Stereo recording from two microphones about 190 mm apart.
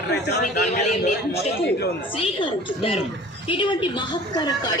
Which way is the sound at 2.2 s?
30° left (ahead or behind).